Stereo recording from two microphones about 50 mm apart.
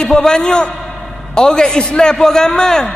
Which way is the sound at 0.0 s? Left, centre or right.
Centre.